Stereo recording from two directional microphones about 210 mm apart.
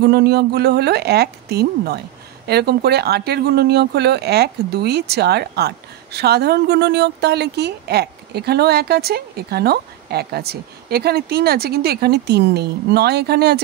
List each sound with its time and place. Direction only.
0.0 s speech: 50° right (ahead or behind)